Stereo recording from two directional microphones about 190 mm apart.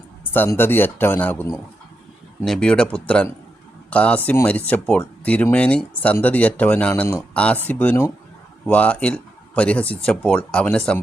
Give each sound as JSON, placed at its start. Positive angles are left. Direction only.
{"t": 0.3, "sound": "speech", "side_deg": 10}